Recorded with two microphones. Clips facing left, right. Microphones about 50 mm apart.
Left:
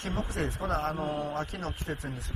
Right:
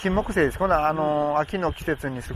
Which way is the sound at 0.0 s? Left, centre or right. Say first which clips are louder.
Right 11 dB; right.